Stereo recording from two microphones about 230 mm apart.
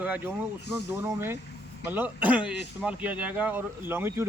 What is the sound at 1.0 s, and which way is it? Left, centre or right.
A man's voice, centre.